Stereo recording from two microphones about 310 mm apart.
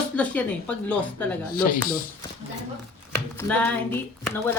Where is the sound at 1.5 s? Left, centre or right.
Left.